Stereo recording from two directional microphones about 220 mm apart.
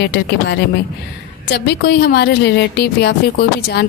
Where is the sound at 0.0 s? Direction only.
50° left (ahead or behind).